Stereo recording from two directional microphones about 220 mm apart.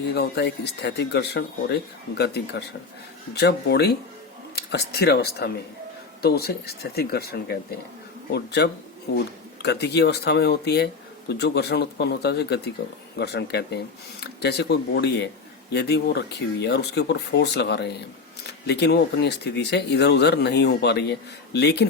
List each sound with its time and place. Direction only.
0.1 s speech: 50° left (ahead or behind)